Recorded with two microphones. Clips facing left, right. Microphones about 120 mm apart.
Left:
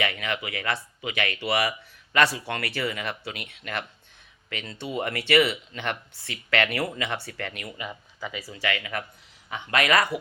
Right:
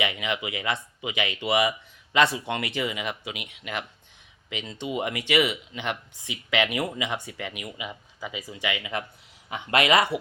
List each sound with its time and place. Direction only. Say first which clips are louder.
0.0 s speech: right 1 dB; 15° right (ahead or behind)
8.4 s speech: left 1 dB; 15° right (ahead or behind)